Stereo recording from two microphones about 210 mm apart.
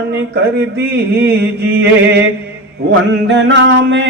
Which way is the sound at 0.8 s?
50° right (ahead or behind).